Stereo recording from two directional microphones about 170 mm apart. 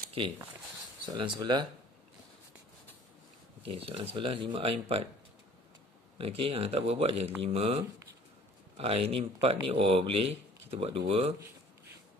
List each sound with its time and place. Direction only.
1.0 s speech: 25° right (ahead or behind)
3.6 s speech: 35° right (ahead or behind)
6.1 s speech: 30° right (ahead or behind)